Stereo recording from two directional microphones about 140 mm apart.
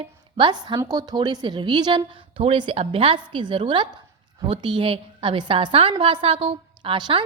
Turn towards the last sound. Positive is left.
turn(degrees=-35)  # may be behind; listen again after turning